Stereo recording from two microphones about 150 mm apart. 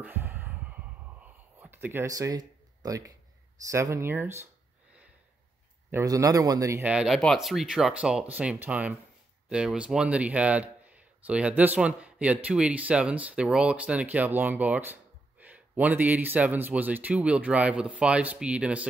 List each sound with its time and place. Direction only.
0.0 s a sound: 15° right (ahead or behind)
3.6 s speech: 20° right (ahead or behind)
5.9 s a man's voice: 20° right (ahead or behind)
6.9 s speech: 5° right (ahead or behind)